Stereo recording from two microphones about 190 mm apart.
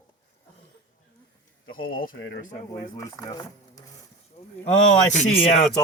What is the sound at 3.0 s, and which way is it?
Speech, 20° left (ahead or behind).